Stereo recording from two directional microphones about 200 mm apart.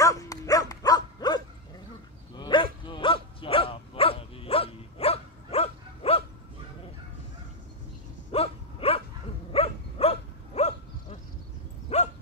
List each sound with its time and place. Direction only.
0.0 s dog: 15° left (ahead or behind)
8.3 s a sound: 30° left (ahead or behind)
9.5 s dog: 30° left (ahead or behind)